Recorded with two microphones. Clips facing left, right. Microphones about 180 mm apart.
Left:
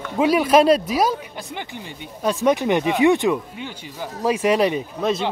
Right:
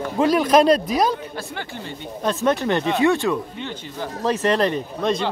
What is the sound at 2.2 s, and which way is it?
Speech, 10° left (ahead or behind).